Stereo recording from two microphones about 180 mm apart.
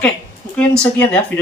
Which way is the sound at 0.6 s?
5° left (ahead or behind).